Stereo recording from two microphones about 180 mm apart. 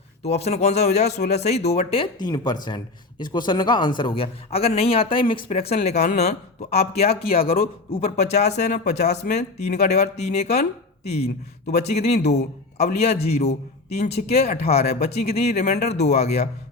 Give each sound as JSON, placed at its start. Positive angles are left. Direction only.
{"t": 0.2, "sound": "speech", "side_deg": 35}
{"t": 2.2, "sound": "a man's voice", "side_deg": 20}
{"t": 5.5, "sound": "speech", "side_deg": 40}